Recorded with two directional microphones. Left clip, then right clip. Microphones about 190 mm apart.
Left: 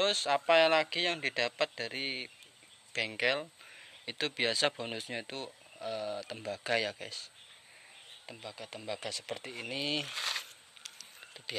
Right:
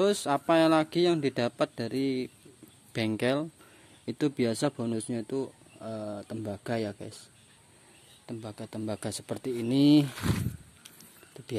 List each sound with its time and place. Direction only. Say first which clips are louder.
0.0 s speech: right 3 dB; 10° right (ahead or behind)
2.9 s speech: right 3 dB; 30° right (ahead or behind)
3.2 s speech: right 1 dB; 10° right (ahead or behind); by 7.2 s 5° left (ahead or behind)
8.3 s speech: right 4 dB; 15° right (ahead or behind)
11.4 s a sound: left 5 dB; 10° right (ahead or behind)